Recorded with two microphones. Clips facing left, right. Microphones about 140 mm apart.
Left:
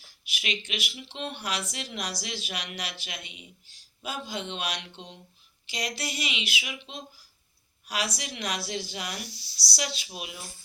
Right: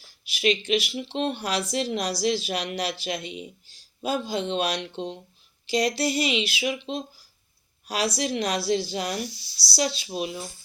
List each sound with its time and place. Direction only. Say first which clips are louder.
0.3 s speech: right 12 dB; 30° right (ahead or behind)